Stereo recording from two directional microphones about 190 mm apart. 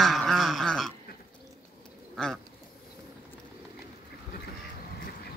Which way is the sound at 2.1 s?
5° left (ahead or behind).